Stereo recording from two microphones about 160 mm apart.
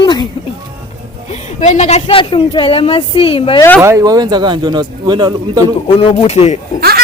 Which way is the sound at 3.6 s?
10° left (ahead or behind).